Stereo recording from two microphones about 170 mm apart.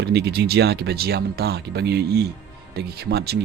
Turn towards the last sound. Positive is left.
turn(degrees=-70)  # may be behind; listen again after turning